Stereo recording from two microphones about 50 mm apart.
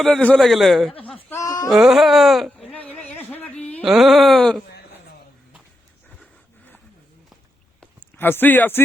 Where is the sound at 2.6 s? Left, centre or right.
Left.